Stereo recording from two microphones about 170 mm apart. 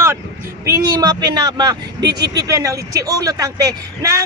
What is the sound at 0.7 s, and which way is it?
A man's voice, 25° right (ahead or behind).